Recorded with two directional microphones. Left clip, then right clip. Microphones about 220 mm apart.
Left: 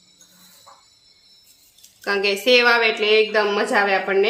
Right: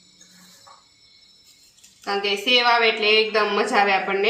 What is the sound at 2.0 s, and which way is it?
A woman's voice, 40° left (ahead or behind).